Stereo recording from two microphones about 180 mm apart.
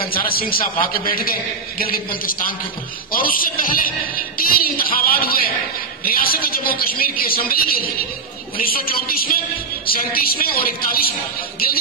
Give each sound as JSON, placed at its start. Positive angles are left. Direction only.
{"t": 0.1, "sound": "a man's voice", "side_deg": 55}